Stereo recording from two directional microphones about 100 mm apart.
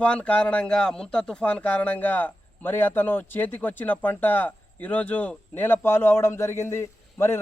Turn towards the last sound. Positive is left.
turn(degrees=25)  # may be behind; listen again after turning